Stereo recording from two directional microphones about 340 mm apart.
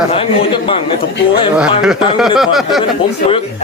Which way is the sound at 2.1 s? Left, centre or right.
Centre.